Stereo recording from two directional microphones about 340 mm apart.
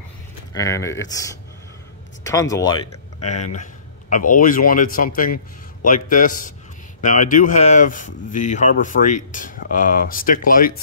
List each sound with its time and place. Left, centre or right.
0.6 s speech: centre; by 10.7 s left